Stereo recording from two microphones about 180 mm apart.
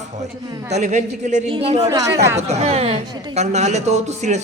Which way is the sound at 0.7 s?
40° right (ahead or behind).